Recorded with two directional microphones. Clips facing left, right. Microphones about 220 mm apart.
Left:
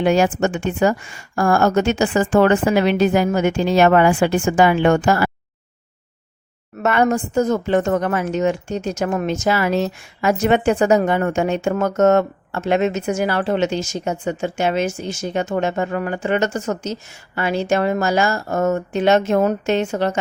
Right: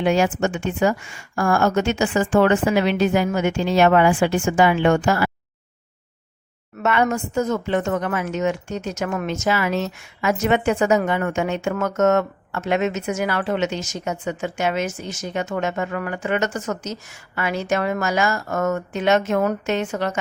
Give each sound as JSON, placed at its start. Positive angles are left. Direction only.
{"t": 0.0, "sound": "a woman's voice", "side_deg": 40}
{"t": 6.8, "sound": "a woman's voice", "side_deg": 40}